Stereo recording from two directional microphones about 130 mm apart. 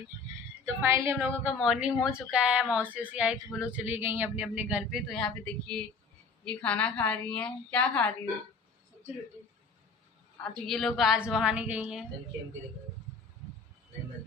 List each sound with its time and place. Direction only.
0.8 s speech: 20° right (ahead or behind)
1.5 s a woman's voice: 5° right (ahead or behind)
10.7 s a woman's voice: 5° left (ahead or behind)